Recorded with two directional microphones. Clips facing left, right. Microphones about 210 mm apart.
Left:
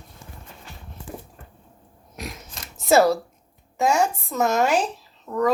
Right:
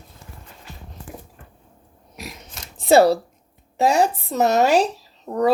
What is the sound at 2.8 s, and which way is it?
Speech, 30° right (ahead or behind).